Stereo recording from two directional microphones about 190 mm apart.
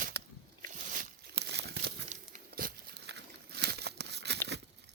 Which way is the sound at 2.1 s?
45° right (ahead or behind).